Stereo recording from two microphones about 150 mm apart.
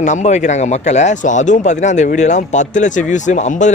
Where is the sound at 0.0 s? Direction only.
50° left (ahead or behind).